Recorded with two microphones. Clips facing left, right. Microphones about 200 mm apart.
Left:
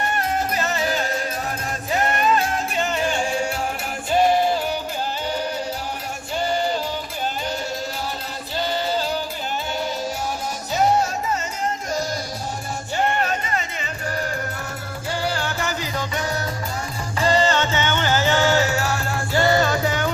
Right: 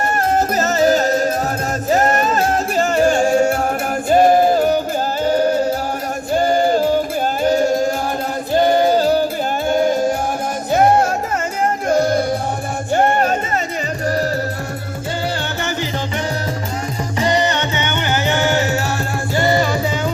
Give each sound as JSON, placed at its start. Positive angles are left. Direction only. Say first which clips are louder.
{"t": 0.0, "sound": "music", "louder": "right 6 dB", "side_deg": -45}
{"t": 17.2, "sound": "music", "louder": "right 1 dB", "side_deg": -20}